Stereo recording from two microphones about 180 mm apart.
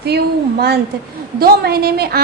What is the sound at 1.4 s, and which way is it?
Speech, 60° right (ahead or behind).